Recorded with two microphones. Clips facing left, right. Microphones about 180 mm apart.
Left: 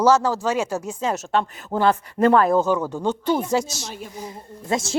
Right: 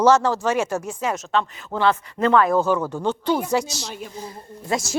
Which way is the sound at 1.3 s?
45° left (ahead or behind).